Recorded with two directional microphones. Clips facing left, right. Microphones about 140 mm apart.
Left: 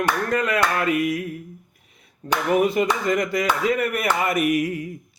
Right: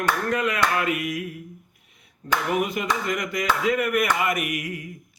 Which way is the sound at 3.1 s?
35° left (ahead or behind).